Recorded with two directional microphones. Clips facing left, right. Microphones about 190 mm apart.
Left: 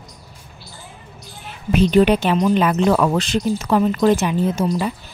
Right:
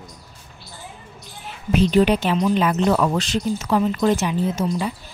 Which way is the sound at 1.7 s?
60° left (ahead or behind).